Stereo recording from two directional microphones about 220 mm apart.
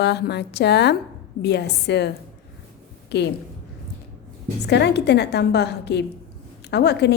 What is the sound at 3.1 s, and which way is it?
Speech, 50° left (ahead or behind).